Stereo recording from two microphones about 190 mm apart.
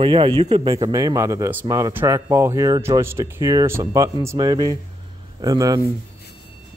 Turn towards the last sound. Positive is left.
turn(degrees=-20)  # may be behind; listen again after turning